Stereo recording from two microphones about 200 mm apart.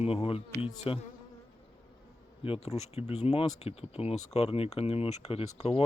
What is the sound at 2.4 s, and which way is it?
Speech, 30° left (ahead or behind).